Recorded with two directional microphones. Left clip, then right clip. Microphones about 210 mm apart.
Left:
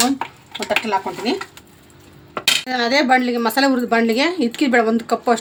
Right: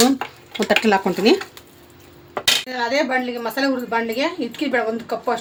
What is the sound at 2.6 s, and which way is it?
A woman's voice, 50° left (ahead or behind).